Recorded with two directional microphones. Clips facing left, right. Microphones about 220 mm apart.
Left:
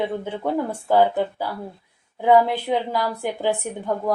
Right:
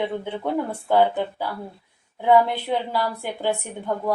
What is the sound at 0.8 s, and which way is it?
Speech, 5° left (ahead or behind).